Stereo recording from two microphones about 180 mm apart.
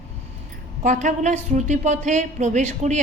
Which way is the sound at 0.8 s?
40° right (ahead or behind).